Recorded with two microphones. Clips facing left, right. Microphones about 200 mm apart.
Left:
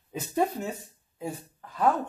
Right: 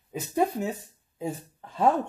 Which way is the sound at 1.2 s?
25° right (ahead or behind).